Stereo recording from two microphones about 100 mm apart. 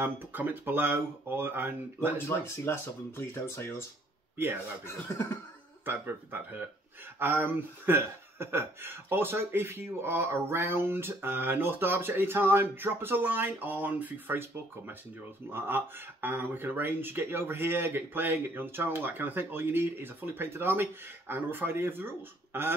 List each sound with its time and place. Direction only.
0.0 s speech: 20° right (ahead or behind)
2.1 s speech: 25° left (ahead or behind)
5.9 s speech: 20° right (ahead or behind)